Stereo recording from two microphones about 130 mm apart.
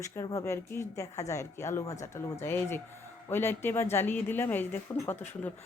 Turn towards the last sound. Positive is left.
turn(degrees=15)  # may be behind; listen again after turning